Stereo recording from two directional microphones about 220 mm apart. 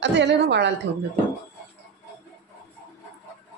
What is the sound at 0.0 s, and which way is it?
Speech, 55° right (ahead or behind).